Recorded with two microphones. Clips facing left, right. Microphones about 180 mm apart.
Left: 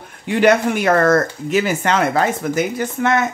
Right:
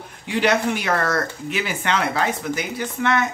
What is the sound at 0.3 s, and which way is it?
Speech, 50° left (ahead or behind).